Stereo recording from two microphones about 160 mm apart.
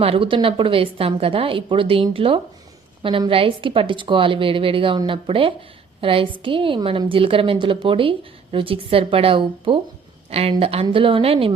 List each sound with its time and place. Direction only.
0.0 s a woman's voice: 35° right (ahead or behind)